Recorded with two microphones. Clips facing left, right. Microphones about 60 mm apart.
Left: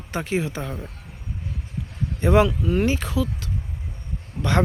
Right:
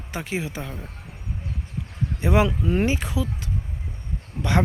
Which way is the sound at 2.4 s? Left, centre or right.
Right.